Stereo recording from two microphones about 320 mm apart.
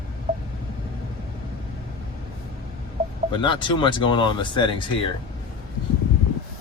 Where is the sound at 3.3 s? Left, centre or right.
Centre.